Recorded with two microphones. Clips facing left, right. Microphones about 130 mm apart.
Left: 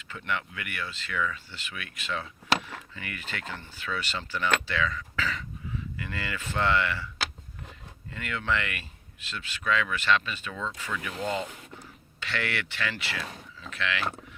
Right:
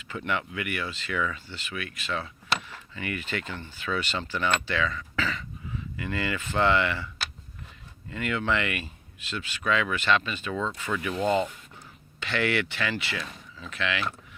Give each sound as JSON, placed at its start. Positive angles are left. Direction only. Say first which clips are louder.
{"t": 0.1, "sound": "speech", "louder": "right 3 dB", "side_deg": -15}
{"t": 1.5, "sound": "speech", "louder": "right 5 dB", "side_deg": 5}
{"t": 8.1, "sound": "speech", "louder": "right 3 dB", "side_deg": -15}
{"t": 10.5, "sound": "speech", "louder": "right 6 dB", "side_deg": -25}
{"t": 12.3, "sound": "speech", "louder": "right 6 dB", "side_deg": -10}